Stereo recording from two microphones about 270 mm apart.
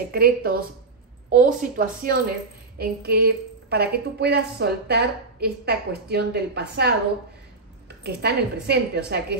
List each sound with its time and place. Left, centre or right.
0.1 s a woman's voice: right
8.0 s a woman's voice: right